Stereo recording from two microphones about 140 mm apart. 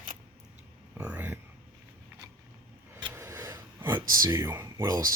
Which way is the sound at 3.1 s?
20° right (ahead or behind).